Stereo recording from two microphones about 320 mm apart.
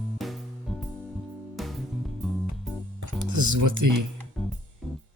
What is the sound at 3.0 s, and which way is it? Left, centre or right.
Speech, right.